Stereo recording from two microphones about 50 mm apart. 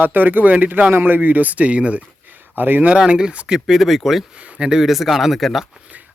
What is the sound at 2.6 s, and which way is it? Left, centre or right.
Speech, right.